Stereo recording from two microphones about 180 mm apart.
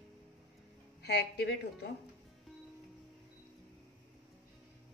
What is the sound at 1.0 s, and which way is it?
Speech, 65° left (ahead or behind).